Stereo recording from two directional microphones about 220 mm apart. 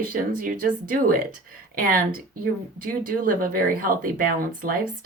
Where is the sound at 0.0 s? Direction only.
40° right (ahead or behind).